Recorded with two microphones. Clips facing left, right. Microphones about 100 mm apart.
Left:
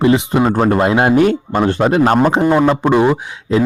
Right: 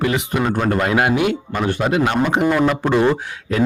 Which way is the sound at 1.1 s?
40° left (ahead or behind).